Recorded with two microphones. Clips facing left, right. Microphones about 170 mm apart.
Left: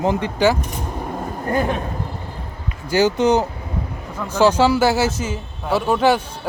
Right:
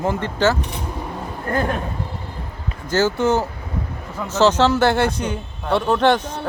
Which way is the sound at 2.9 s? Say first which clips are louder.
Left 2 dB; 15° left (ahead or behind).